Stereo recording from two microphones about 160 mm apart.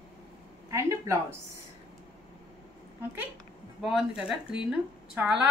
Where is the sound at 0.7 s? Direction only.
15° right (ahead or behind).